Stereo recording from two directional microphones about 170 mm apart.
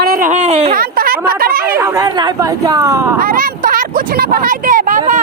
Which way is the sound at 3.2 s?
55° right (ahead or behind).